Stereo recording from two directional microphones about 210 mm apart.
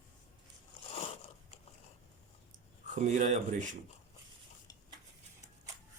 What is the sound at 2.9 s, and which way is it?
Speech, 35° right (ahead or behind).